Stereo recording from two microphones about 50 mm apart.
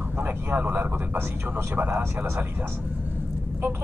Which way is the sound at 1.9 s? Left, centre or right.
Right.